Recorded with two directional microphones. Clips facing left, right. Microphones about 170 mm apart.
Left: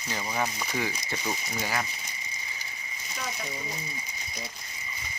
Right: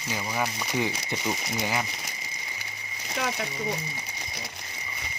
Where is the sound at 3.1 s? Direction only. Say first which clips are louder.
Right 6 dB; 75° right (ahead or behind).